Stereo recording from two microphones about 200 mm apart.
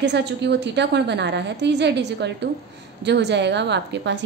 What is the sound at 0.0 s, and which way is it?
A woman's voice, 60° right (ahead or behind).